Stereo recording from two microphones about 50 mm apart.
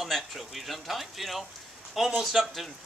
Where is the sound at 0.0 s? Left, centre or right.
Centre.